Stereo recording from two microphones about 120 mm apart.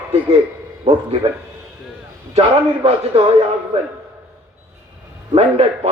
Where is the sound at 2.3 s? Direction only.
60° right (ahead or behind).